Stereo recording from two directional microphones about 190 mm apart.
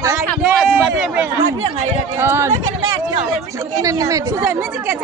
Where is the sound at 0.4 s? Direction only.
5° right (ahead or behind).